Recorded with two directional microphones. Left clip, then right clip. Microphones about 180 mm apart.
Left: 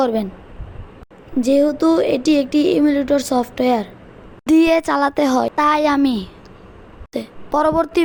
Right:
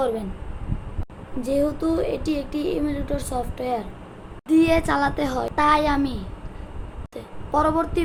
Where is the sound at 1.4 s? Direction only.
55° left (ahead or behind).